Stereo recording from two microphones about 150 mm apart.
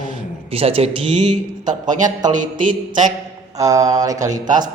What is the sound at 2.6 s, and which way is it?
Mantra, 60° right (ahead or behind).